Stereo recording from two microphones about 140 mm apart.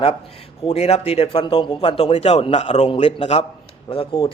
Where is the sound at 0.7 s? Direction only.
45° left (ahead or behind).